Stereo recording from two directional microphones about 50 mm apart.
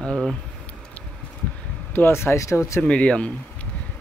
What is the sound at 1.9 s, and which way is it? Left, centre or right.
Speech, left.